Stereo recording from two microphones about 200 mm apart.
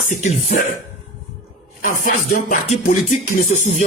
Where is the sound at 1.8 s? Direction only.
45° left (ahead or behind).